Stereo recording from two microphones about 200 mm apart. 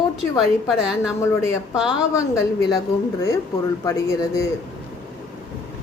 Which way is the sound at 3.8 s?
15° left (ahead or behind).